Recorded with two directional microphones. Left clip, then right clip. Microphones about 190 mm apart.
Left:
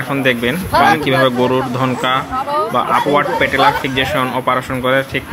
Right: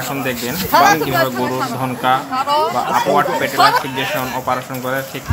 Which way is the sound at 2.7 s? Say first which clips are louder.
Left 2 dB; 15° left (ahead or behind).